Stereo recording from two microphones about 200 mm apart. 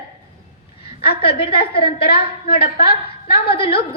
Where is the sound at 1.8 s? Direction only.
25° left (ahead or behind).